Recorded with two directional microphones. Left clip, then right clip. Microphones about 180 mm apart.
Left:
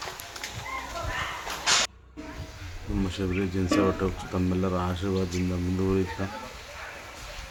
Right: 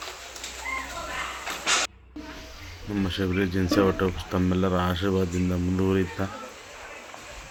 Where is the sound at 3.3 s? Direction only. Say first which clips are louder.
Right 2 dB; 20° right (ahead or behind).